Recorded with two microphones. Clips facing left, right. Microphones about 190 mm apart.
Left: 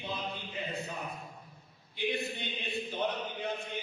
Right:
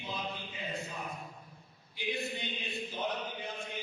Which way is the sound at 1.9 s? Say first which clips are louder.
Left 3 dB; 60° left (ahead or behind).